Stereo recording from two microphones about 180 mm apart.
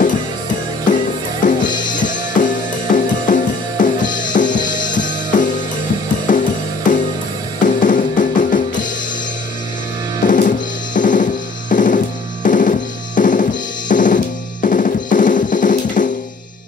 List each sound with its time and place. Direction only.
0.8 s music: 45° left (ahead or behind)
10.2 s drum kit: 45° left (ahead or behind)
11.7 s music: 45° left (ahead or behind)
12.4 s drum kit: 45° left (ahead or behind)